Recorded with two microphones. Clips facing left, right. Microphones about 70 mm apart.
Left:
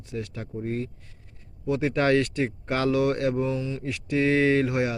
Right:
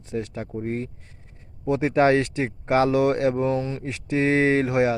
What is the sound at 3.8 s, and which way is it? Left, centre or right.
Speech, right.